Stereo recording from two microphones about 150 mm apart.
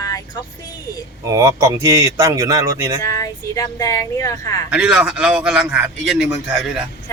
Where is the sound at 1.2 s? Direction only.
20° right (ahead or behind).